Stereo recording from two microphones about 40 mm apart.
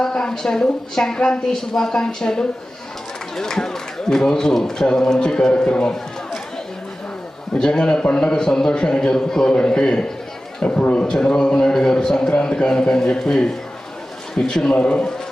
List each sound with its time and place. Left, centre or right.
0.0 s a woman's voice: centre
7.5 s a woman's voice: centre
14.8 s a man's voice: left